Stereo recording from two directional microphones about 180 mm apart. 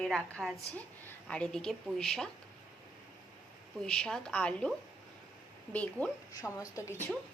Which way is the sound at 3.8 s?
5° left (ahead or behind).